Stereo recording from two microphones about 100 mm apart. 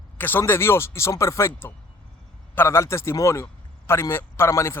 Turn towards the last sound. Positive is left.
turn(degrees=30)  # may be behind; listen again after turning